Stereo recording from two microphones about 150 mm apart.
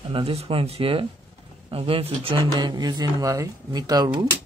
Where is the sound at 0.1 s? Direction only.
40° right (ahead or behind).